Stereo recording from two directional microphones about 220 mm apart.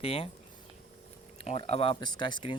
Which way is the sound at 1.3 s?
30° left (ahead or behind).